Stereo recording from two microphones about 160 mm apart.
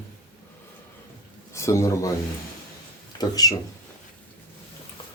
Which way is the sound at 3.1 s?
25° left (ahead or behind).